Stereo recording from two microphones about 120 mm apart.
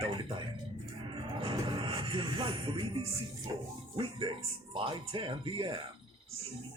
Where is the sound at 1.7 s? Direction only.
45° right (ahead or behind).